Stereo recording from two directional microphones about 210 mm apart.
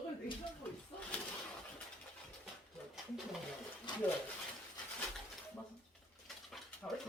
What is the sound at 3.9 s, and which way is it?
Speech, 20° left (ahead or behind).